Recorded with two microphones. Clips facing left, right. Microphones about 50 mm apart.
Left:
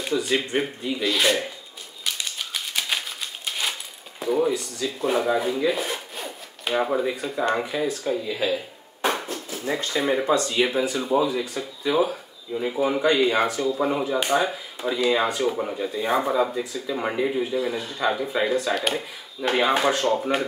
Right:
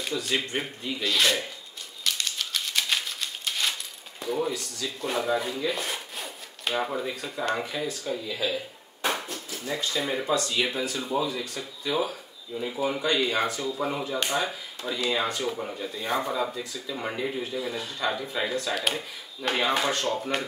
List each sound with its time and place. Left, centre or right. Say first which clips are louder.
0.0 s speech: left 5 dB; centre
2.0 s typewriter: even; centre
4.2 s speech: left 6 dB; centre
8.4 s a sound: left 4 dB; centre
9.7 s speech: left 5 dB; left
13.4 s speech: left 5 dB; centre